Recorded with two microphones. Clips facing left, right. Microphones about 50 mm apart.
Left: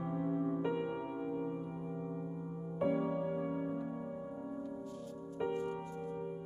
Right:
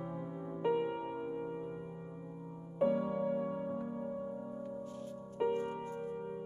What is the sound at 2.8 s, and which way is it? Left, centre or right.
Music, centre.